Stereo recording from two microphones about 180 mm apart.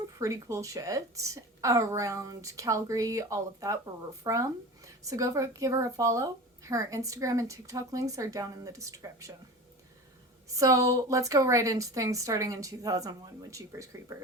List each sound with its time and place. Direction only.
0.2 s a woman's voice: 20° right (ahead or behind)
10.6 s a woman's voice: 20° right (ahead or behind)